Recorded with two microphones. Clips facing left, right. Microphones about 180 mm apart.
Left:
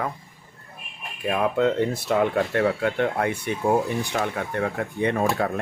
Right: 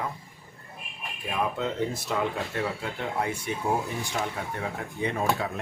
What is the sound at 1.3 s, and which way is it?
Speech, 60° left (ahead or behind).